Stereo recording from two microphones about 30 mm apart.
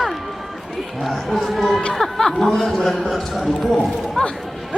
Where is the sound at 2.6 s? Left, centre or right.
Centre.